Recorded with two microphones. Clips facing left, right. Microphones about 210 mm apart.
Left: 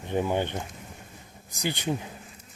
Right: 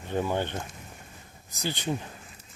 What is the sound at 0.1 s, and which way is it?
Speech, 15° left (ahead or behind).